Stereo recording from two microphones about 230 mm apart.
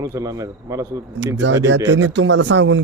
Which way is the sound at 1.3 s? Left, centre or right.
Right.